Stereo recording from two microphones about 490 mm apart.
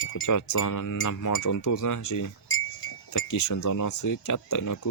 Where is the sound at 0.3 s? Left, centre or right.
Left.